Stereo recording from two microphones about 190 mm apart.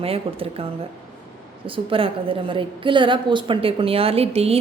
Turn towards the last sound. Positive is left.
turn(degrees=-30)  # may be behind; listen again after turning